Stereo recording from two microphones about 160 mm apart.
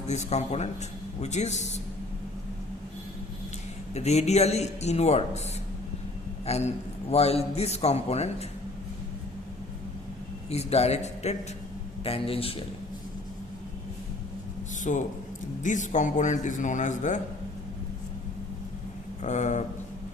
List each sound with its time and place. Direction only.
0.1 s a man's voice: 45° left (ahead or behind)
3.9 s a man's voice: 40° left (ahead or behind)
6.4 s a man's voice: 45° left (ahead or behind)
10.5 s a man's voice: 40° left (ahead or behind)
14.9 s a man's voice: 50° left (ahead or behind)
19.2 s a man's voice: 50° left (ahead or behind)